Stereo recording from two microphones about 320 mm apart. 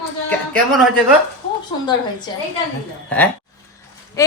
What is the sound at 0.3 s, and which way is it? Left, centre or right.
Speech, centre.